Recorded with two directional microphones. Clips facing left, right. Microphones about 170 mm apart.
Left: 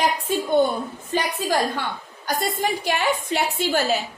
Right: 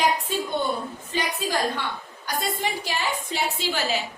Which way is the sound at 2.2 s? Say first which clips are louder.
Left 4 dB; 55° left (ahead or behind).